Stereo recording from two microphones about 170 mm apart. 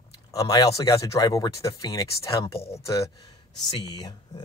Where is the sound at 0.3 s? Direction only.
20° left (ahead or behind).